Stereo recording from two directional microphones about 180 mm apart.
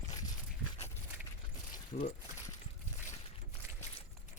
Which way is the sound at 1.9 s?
50° left (ahead or behind).